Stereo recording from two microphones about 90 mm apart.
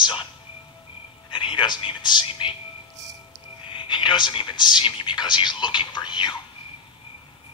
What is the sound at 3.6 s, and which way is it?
Speech, 65° left (ahead or behind).